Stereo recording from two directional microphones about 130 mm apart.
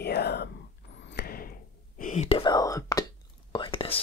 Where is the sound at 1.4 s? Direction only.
90° left; by 2.4 s 60° left (ahead or behind).